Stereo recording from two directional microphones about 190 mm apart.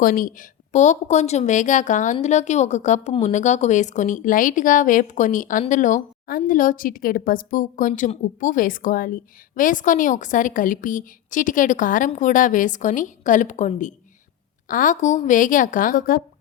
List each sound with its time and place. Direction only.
0.0 s a woman's voice: 45° left (ahead or behind)